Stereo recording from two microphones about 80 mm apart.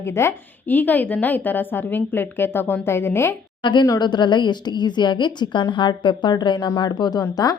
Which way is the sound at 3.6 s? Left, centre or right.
Left.